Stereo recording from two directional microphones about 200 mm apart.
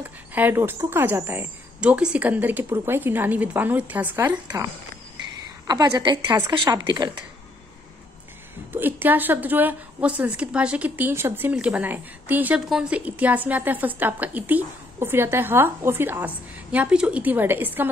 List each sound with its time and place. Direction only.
0.0 s speech: 10° right (ahead or behind)
5.7 s a woman's voice: 20° right (ahead or behind)
8.7 s speech: 10° right (ahead or behind)